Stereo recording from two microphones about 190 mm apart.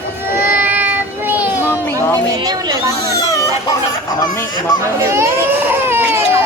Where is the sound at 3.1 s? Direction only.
15° left (ahead or behind).